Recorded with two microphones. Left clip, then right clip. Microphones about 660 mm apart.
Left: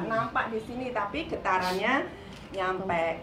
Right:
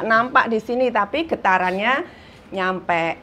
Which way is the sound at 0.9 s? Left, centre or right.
Right.